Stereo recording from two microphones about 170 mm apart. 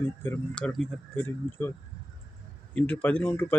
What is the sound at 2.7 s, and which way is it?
Speech, 10° left (ahead or behind).